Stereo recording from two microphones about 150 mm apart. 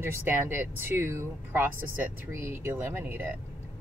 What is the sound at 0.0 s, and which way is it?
Speech, 15° right (ahead or behind).